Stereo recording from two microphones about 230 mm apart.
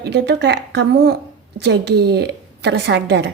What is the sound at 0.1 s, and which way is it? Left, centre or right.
A woman's voice, right.